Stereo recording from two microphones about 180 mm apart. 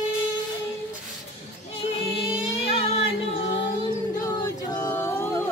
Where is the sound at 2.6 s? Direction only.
35° left (ahead or behind).